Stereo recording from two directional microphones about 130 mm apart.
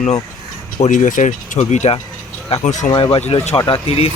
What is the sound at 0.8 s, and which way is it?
Speech, 70° left (ahead or behind).